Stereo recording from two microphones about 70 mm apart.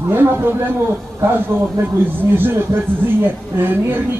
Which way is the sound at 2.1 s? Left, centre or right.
Right.